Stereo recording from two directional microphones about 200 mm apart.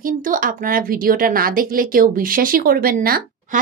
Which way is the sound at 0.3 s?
45° right (ahead or behind).